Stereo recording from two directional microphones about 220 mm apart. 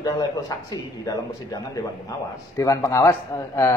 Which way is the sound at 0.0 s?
15° left (ahead or behind).